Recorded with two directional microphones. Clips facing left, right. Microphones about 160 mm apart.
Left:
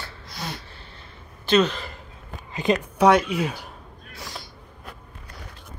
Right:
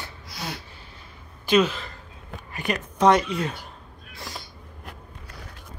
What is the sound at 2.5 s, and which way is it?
Speech, 20° left (ahead or behind).